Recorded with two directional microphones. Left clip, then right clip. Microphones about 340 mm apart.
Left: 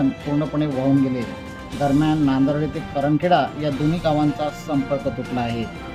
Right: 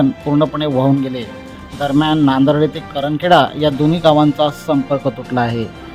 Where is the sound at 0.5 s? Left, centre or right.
Centre.